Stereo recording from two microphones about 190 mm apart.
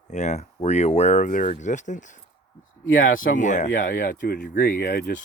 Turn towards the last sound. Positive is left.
turn(degrees=50)  # may be behind; listen again after turning